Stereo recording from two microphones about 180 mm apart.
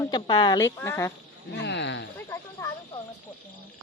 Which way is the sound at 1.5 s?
75° left (ahead or behind).